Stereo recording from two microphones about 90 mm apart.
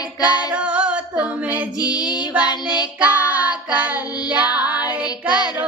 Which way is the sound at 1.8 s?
50° left (ahead or behind).